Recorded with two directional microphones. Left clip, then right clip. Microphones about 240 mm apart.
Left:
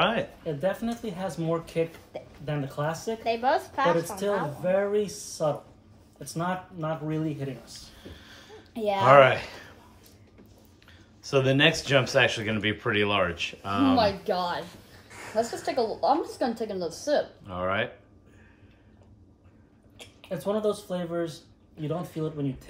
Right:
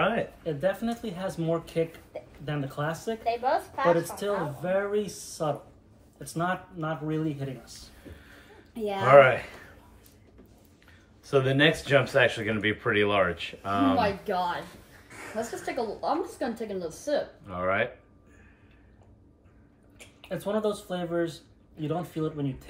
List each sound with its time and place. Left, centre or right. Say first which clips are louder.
0.0 s speech: left 1 dB; centre
3.3 s a woman's voice: left 2 dB; left
4.0 s speech: left 2 dB; centre
11.2 s speech: left 1 dB; centre
15.6 s speech: left 4 dB; centre
20.2 s speech: left 1 dB; centre